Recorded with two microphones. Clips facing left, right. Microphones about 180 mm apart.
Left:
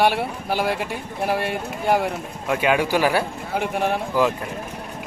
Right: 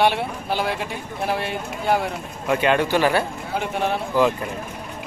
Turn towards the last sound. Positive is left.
turn(degrees=10)  # may be behind; listen again after turning